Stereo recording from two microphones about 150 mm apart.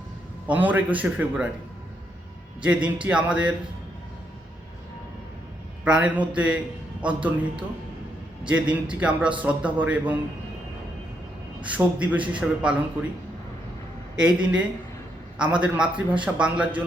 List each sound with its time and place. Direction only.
0.4 s a man's voice: 10° right (ahead or behind)
2.6 s a man's voice: 10° right (ahead or behind)
5.8 s a man's voice: 10° right (ahead or behind)
8.4 s a man's voice: 10° right (ahead or behind)
11.6 s a man's voice: 10° right (ahead or behind)
14.3 s a man's voice: 5° right (ahead or behind)